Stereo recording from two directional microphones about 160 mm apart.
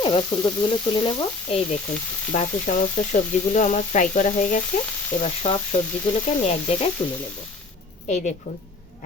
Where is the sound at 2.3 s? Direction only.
50° left (ahead or behind).